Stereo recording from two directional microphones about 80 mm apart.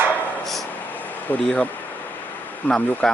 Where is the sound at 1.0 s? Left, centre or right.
Left.